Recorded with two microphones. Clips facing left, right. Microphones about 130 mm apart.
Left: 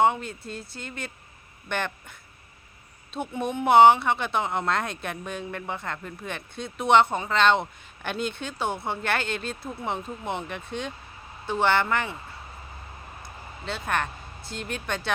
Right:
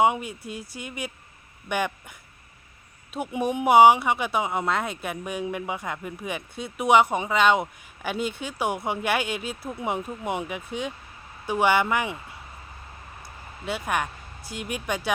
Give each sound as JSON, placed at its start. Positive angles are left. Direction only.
{"t": 0.0, "sound": "speech", "side_deg": -10}
{"t": 13.2, "sound": "speech", "side_deg": -10}